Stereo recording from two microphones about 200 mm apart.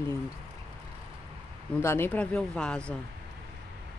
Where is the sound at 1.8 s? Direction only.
10° left (ahead or behind).